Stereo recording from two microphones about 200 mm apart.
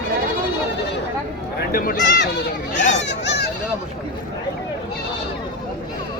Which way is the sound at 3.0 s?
60° left (ahead or behind).